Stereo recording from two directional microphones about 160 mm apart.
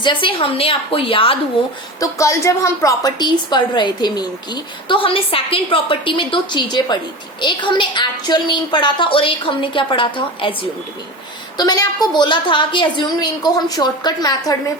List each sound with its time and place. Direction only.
0.0 s a woman's voice: 30° left (ahead or behind)
2.0 s a woman's voice: 20° left (ahead or behind)